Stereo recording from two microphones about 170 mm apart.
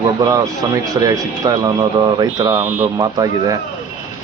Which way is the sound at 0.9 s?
20° right (ahead or behind).